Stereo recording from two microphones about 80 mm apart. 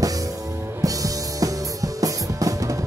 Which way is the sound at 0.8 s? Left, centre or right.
Right.